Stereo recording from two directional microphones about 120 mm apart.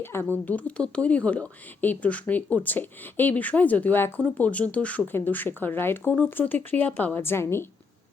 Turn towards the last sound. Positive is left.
turn(degrees=20)  # may be behind; listen again after turning